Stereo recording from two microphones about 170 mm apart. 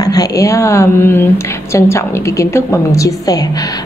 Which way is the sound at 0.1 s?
20° left (ahead or behind).